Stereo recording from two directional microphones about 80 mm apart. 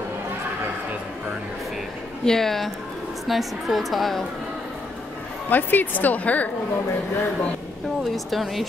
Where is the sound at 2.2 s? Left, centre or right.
Centre.